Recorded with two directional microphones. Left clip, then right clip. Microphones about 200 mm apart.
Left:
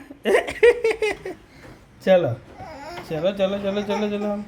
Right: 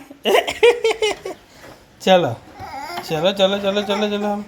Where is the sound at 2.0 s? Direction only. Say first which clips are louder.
Right 3 dB; 15° right (ahead or behind).